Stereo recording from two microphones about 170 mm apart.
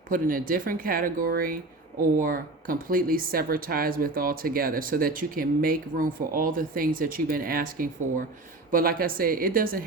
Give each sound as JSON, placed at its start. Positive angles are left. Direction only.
{"t": 0.1, "sound": "speech", "side_deg": -55}